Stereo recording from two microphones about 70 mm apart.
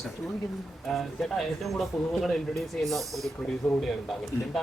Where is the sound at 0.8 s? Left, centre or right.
Centre.